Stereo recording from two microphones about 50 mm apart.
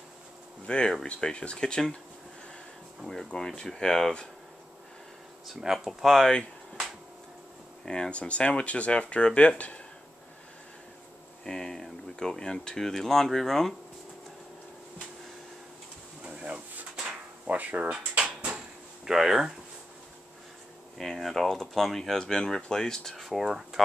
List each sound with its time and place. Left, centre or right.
0.7 s speech: centre
3.3 s speech: centre
5.5 s speech: centre
7.8 s speech: centre
11.4 s speech: centre
16.3 s drawer open or close: right
18.1 s drawer open or close: right
19.0 s speech: centre
21.0 s speech: centre